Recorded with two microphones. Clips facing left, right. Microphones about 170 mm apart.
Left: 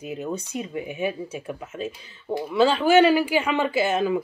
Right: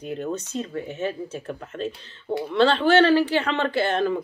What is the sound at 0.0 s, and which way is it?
Speech, 5° left (ahead or behind).